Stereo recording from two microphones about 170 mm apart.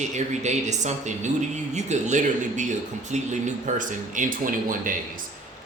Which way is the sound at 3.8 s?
50° right (ahead or behind).